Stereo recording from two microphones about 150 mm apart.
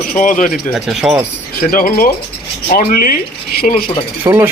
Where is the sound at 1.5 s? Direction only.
70° left (ahead or behind).